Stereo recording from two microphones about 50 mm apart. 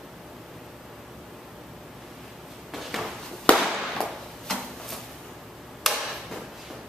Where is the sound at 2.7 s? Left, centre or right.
Centre.